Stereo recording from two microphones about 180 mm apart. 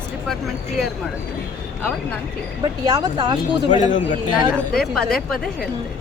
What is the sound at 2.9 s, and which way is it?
Speech, 25° right (ahead or behind).